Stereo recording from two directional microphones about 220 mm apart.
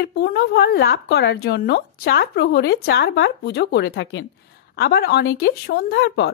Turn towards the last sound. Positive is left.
turn(degrees=50)  # may be behind; listen again after turning